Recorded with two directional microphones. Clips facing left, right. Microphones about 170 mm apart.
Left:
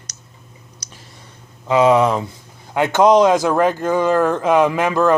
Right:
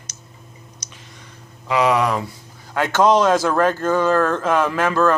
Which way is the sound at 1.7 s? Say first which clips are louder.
Left 4 dB; 25° left (ahead or behind).